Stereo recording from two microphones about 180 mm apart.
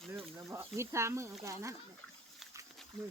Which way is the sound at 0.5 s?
15° right (ahead or behind).